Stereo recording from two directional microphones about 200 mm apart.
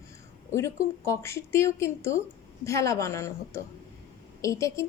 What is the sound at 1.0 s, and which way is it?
A woman's voice, 15° left (ahead or behind).